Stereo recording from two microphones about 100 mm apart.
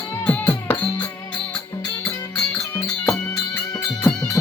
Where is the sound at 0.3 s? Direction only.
20° left (ahead or behind).